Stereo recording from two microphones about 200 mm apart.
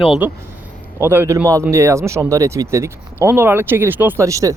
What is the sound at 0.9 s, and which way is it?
Speech, 10° right (ahead or behind).